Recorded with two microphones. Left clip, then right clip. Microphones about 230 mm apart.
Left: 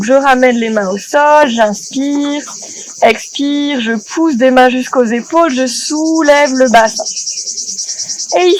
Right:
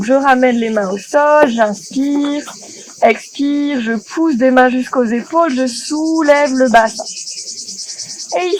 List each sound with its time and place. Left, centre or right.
0.0 s speech: left
8.3 s insect: left